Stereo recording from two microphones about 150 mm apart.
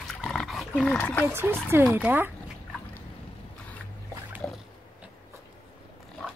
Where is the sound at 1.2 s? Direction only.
15° right (ahead or behind).